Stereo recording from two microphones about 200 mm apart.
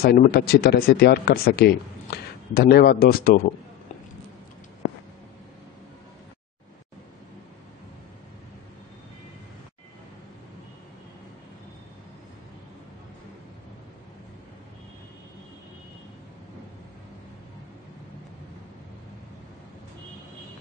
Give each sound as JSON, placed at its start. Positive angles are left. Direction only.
{"t": 0.0, "sound": "speech", "side_deg": 50}